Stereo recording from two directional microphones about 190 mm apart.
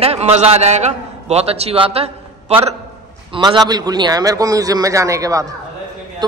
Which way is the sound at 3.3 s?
25° right (ahead or behind).